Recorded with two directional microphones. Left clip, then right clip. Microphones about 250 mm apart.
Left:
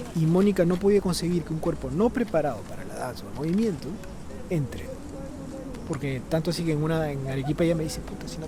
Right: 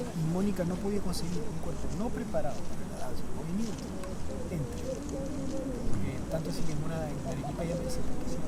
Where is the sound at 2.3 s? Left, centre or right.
Centre.